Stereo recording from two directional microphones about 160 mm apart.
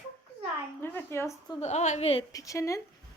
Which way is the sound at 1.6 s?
45° left (ahead or behind).